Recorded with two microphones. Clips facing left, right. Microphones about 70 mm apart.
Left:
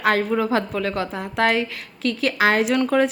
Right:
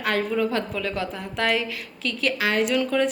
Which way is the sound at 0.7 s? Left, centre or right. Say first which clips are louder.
Left 3 dB; left.